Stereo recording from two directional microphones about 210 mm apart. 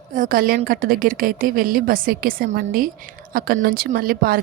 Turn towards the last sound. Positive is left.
turn(degrees=-45)  # may be behind; listen again after turning